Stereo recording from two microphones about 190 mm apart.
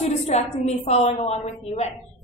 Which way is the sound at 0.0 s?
35° left (ahead or behind).